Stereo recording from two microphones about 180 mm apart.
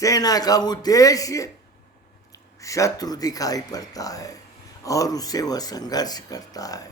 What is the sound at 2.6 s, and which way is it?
Speech, 20° left (ahead or behind).